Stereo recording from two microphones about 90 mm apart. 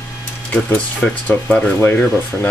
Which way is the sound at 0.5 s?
15° left (ahead or behind).